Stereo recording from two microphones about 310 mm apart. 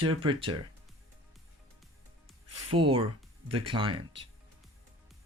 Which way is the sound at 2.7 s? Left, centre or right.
Centre.